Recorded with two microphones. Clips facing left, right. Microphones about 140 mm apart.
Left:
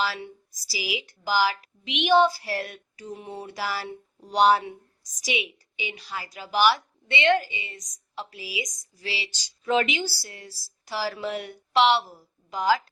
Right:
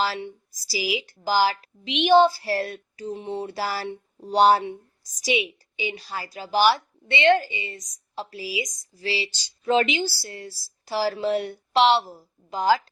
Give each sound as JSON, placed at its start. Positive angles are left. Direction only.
{"t": 0.0, "sound": "speech", "side_deg": -30}